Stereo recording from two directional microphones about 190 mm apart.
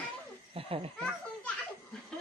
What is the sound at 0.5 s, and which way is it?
Speech, 30° right (ahead or behind).